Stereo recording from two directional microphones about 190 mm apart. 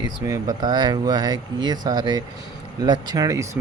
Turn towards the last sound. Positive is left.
turn(degrees=-15)  # may be behind; listen again after turning